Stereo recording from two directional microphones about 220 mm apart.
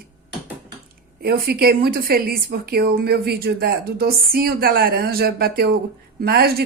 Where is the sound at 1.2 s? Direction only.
45° right (ahead or behind).